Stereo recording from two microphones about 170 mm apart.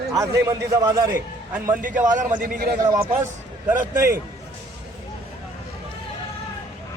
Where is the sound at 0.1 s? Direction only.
15° right (ahead or behind).